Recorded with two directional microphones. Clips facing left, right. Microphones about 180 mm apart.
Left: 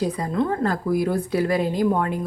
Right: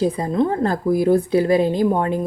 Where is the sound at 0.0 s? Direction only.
25° right (ahead or behind).